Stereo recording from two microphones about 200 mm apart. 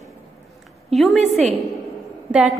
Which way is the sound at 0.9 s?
Centre (ahead or behind).